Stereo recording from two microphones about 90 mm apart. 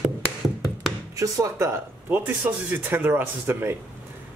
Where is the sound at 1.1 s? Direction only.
35° right (ahead or behind).